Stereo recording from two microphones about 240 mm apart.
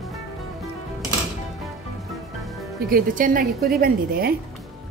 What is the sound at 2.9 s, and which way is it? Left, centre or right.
A woman's voice, right.